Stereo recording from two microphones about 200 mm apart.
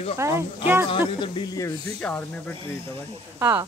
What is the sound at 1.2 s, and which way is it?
Speech, 20° left (ahead or behind).